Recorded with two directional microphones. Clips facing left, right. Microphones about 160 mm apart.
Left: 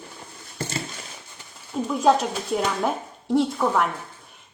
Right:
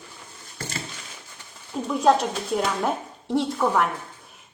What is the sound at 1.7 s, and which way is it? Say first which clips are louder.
A woman's voice: even; centre (ahead or behind).